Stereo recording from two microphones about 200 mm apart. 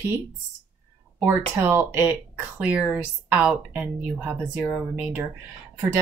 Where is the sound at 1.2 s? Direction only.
10° right (ahead or behind).